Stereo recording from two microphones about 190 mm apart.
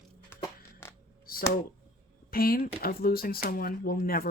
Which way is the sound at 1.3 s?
50° left (ahead or behind).